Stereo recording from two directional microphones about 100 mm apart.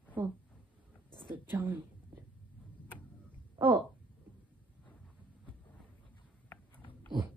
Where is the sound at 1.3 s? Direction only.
20° right (ahead or behind).